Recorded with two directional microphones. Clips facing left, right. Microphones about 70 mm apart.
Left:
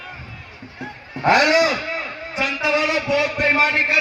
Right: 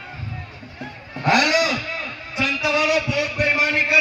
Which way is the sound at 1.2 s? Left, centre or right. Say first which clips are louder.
Left 3 dB; left.